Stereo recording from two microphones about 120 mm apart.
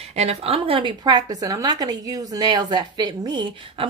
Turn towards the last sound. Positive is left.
turn(degrees=-40)  # may be behind; listen again after turning